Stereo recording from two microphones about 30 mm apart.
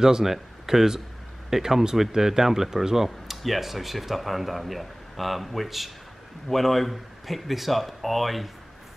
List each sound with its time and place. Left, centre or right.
0.0 s speech: centre
3.4 s speech: centre